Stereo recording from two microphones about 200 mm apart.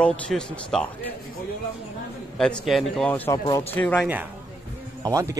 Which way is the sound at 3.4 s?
25° left (ahead or behind).